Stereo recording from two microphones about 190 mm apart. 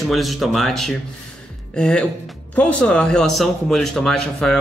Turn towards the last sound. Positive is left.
turn(degrees=5)  # may be behind; listen again after turning